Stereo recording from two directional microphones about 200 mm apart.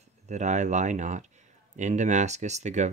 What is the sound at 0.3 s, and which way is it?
Speech, 35° right (ahead or behind).